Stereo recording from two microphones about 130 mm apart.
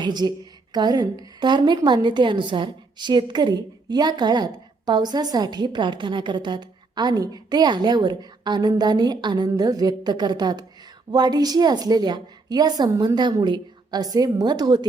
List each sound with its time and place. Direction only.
0.0 s a woman's voice: 35° right (ahead or behind)